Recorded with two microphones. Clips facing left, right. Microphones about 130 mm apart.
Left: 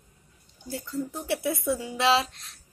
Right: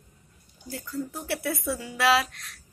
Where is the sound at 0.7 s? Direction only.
25° left (ahead or behind).